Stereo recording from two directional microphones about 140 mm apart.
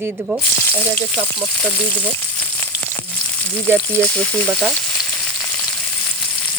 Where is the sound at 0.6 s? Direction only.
10° left (ahead or behind).